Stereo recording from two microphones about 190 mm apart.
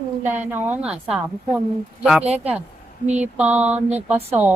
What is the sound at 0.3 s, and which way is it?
Speech, 10° right (ahead or behind).